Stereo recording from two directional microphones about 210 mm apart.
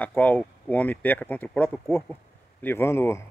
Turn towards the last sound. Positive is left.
turn(degrees=10)  # may be behind; listen again after turning